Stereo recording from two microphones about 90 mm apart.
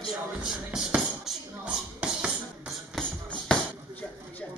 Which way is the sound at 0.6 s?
10° right (ahead or behind).